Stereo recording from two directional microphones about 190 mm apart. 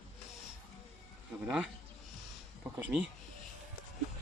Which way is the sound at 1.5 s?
5° right (ahead or behind).